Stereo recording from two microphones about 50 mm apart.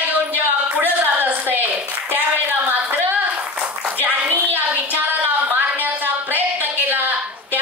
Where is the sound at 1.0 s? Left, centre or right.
Right.